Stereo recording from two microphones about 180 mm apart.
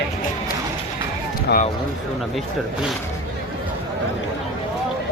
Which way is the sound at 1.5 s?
70° left (ahead or behind).